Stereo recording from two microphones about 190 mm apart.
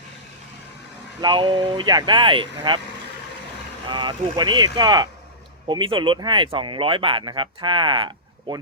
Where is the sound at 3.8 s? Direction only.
25° right (ahead or behind).